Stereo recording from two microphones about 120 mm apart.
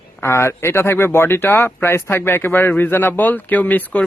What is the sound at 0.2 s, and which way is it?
Speech, 20° left (ahead or behind).